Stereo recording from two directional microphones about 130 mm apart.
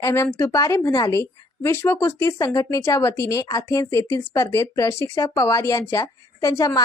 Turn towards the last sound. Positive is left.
turn(degrees=25)  # may be behind; listen again after turning